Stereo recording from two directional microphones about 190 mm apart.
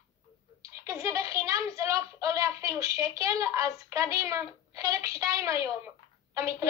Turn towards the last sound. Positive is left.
turn(degrees=-15)  # may be behind; listen again after turning